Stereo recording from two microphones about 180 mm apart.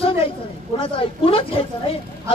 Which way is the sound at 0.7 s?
30° left (ahead or behind).